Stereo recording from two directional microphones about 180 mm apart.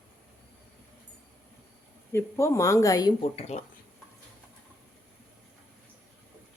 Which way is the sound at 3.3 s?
35° left (ahead or behind).